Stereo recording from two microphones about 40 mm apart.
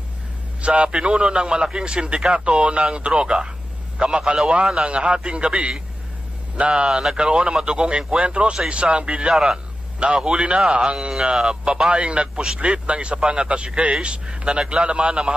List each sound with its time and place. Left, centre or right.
0.6 s a man's voice: right
9.3 s a man's voice: centre
9.9 s a man's voice: right